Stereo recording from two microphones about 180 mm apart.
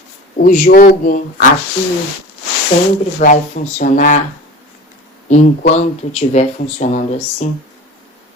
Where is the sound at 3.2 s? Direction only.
45° left (ahead or behind).